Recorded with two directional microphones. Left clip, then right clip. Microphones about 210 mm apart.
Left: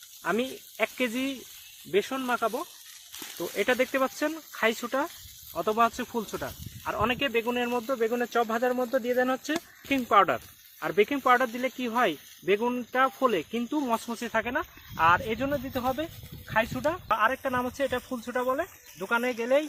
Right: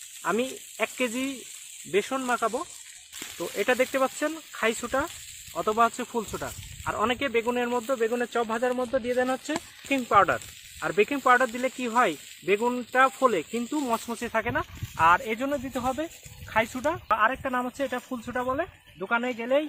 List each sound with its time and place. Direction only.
0.2 s sizzle: 20° left (ahead or behind)
1.9 s speech: 10° left (ahead or behind)